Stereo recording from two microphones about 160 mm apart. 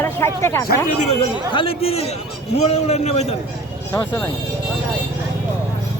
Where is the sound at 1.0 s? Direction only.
40° left (ahead or behind).